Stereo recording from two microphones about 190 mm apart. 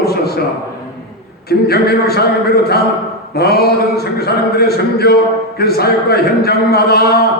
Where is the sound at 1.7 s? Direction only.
55° left (ahead or behind).